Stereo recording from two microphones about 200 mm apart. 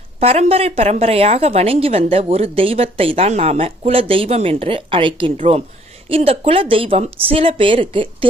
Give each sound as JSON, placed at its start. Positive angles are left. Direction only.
{"t": 0.2, "sound": "a woman's voice", "side_deg": -30}